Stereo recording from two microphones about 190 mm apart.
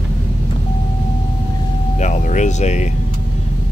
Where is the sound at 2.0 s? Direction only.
40° left (ahead or behind).